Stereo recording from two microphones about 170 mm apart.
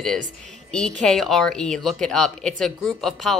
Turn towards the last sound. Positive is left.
turn(degrees=0)  # may be behind; listen again after turning